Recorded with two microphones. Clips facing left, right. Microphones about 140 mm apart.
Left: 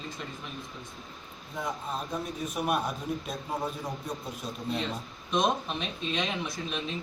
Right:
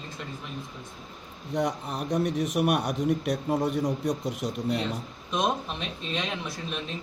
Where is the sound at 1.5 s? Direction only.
75° right (ahead or behind).